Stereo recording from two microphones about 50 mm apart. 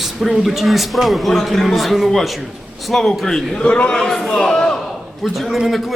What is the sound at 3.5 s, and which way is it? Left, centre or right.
Speech, left.